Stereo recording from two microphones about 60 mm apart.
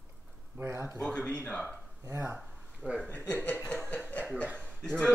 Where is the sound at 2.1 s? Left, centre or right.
Right.